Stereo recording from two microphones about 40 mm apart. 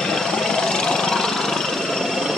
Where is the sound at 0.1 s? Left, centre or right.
Centre.